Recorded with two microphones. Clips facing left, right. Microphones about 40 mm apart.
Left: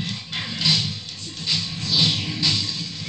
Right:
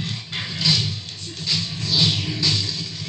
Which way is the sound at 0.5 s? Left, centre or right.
Left.